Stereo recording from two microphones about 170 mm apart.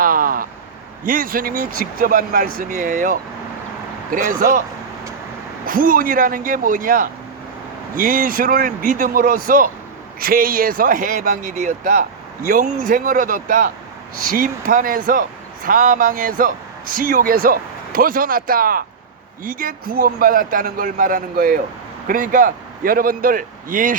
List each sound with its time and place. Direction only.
0.0 s a sound: 55° right (ahead or behind)
1.0 s speech: 55° right (ahead or behind)
5.6 s a man's voice: 55° right (ahead or behind)